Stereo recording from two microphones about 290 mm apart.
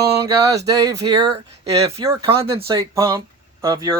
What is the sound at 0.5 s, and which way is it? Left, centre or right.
Speech, centre.